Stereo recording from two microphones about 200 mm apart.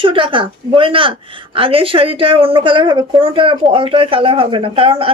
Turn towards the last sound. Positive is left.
turn(degrees=-25)  # may be behind; listen again after turning